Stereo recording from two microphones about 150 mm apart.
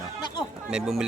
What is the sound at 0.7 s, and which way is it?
Speech, 5° right (ahead or behind).